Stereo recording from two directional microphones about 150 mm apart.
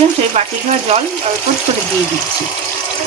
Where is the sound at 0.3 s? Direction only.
45° right (ahead or behind).